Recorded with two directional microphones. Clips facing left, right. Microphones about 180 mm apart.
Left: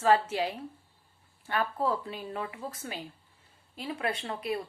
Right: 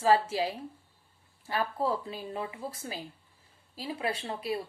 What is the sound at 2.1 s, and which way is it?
Speech, 35° right (ahead or behind).